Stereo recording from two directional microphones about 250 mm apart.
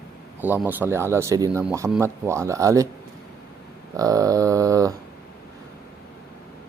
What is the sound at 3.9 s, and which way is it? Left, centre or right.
Speech, centre.